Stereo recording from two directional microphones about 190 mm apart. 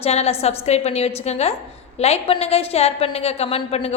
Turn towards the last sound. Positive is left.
turn(degrees=30)  # may be behind; listen again after turning